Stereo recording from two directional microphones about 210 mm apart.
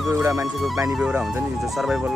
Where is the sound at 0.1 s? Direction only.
15° right (ahead or behind).